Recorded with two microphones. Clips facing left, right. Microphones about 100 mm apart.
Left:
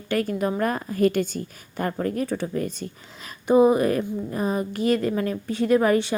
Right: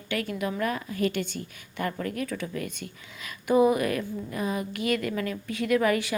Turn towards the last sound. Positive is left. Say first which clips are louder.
# left 5 dB
turn(degrees=30)  # may be behind; listen again after turning